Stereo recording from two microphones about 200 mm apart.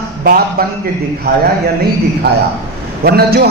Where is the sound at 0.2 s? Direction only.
45° right (ahead or behind).